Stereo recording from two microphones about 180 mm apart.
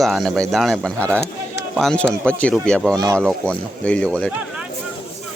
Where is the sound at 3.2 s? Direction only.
5° left (ahead or behind).